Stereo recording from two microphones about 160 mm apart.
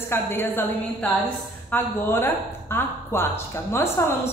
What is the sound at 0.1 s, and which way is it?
A woman's voice, 15° left (ahead or behind).